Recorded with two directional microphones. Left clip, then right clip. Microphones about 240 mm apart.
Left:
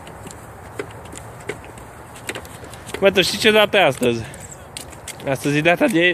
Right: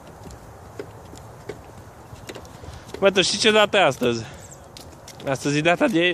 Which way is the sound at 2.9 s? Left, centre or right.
Centre.